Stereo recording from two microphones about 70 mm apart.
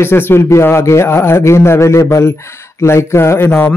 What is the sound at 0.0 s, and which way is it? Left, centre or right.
Speech, left.